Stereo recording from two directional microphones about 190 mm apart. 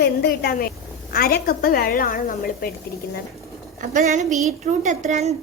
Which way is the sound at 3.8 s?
40° right (ahead or behind).